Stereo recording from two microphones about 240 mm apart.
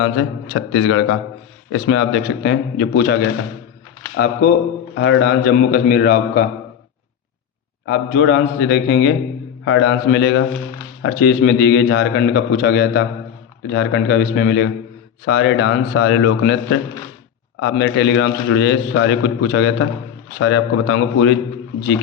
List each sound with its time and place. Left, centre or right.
0.0 s a man's voice: left
7.9 s a man's voice: left